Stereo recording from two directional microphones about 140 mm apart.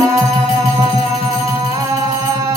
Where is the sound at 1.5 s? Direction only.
25° right (ahead or behind).